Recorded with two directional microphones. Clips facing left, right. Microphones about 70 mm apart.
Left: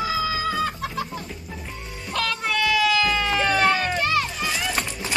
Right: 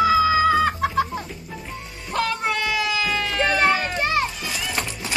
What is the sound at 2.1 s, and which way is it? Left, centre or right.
Music, right.